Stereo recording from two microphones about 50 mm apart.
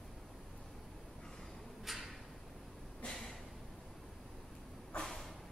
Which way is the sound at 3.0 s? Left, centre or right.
Left.